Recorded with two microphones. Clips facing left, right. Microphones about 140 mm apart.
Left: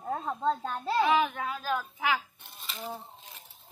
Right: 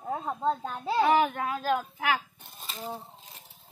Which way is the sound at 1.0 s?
45° right (ahead or behind).